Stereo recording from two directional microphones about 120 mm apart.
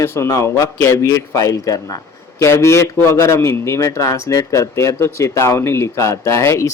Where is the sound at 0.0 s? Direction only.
25° left (ahead or behind).